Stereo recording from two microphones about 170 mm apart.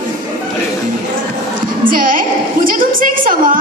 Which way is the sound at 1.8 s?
55° right (ahead or behind).